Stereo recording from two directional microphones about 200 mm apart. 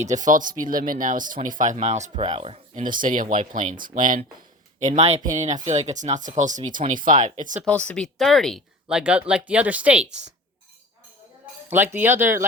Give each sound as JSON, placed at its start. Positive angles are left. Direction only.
{"t": 0.0, "sound": "speech", "side_deg": -40}
{"t": 2.8, "sound": "speech", "side_deg": -40}
{"t": 7.6, "sound": "speech", "side_deg": 5}
{"t": 11.7, "sound": "speech", "side_deg": -10}